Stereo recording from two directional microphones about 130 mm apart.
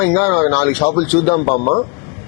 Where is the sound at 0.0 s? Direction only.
15° left (ahead or behind).